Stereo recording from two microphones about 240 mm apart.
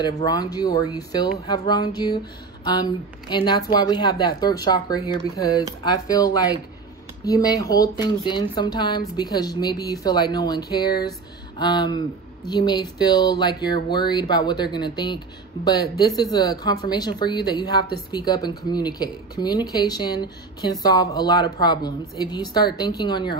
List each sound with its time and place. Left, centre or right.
0.0 s a woman's voice: centre